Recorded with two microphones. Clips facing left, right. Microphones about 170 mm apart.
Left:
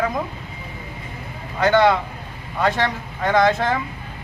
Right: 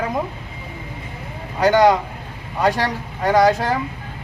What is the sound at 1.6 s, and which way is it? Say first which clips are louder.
Speech: right 2 dB; 35° right (ahead or behind).